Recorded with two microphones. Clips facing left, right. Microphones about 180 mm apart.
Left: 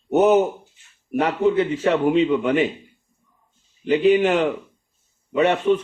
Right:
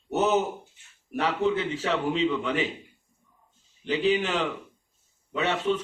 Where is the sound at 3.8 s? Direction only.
55° left (ahead or behind).